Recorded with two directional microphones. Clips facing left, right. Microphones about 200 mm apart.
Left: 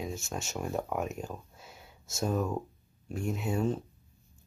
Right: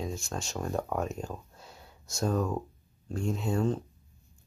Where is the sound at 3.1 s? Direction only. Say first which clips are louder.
Right 2 dB; 20° left (ahead or behind).